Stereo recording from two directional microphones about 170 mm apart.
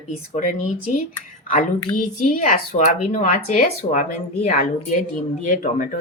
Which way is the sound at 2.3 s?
50° left (ahead or behind).